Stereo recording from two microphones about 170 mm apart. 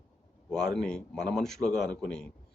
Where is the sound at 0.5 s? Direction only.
Centre (ahead or behind).